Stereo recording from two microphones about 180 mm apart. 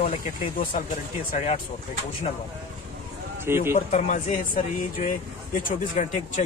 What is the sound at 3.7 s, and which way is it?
Speech, 45° left (ahead or behind).